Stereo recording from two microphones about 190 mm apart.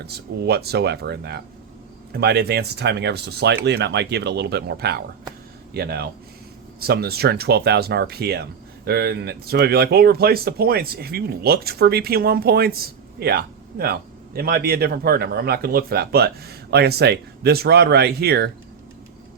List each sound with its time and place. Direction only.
0.0 s speech: 60° right (ahead or behind)